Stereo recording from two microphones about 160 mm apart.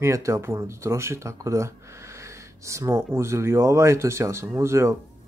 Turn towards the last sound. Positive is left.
turn(degrees=-15)  # may be behind; listen again after turning